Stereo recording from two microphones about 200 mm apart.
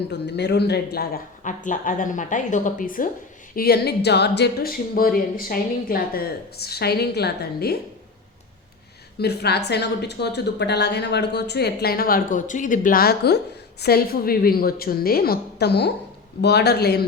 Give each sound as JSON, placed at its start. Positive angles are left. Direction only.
{"t": 0.1, "sound": "speech", "side_deg": 55}
{"t": 9.1, "sound": "a woman's voice", "side_deg": 55}